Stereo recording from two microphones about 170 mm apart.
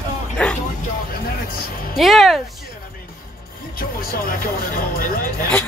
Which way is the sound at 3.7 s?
60° left (ahead or behind).